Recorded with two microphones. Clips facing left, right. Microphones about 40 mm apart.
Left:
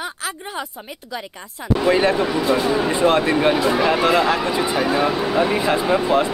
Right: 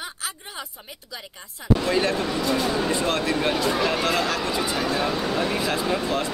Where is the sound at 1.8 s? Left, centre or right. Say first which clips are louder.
Left 11 dB; left.